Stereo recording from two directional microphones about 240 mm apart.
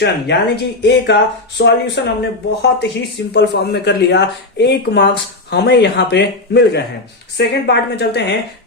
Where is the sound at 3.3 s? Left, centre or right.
Left.